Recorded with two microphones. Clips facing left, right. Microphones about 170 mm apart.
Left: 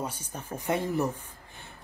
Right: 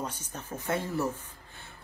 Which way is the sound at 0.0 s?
10° left (ahead or behind).